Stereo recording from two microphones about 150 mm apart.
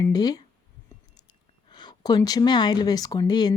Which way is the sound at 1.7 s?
30° left (ahead or behind).